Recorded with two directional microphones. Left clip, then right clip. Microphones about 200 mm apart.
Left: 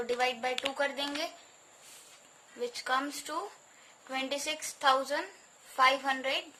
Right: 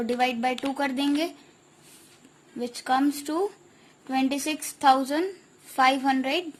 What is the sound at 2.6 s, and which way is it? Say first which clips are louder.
A woman's voice: right 7 dB; 30° right (ahead or behind).